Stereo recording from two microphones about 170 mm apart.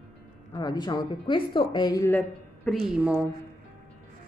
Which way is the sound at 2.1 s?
5° left (ahead or behind).